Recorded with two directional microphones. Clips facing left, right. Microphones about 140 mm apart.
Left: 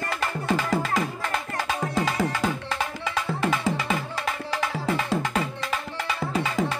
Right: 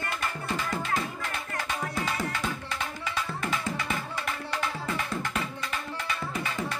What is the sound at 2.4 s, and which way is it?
Music, 90° left.